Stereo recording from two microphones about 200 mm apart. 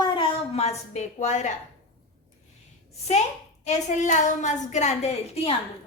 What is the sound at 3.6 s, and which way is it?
A woman's voice, 40° left (ahead or behind).